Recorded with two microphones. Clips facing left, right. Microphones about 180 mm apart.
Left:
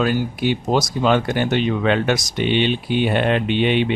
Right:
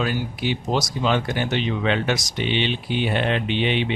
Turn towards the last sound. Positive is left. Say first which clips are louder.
# left 5 dB
turn(degrees=50)  # may be behind; listen again after turning